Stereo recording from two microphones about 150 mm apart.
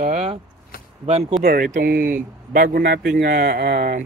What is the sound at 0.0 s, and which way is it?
Speech, 50° right (ahead or behind).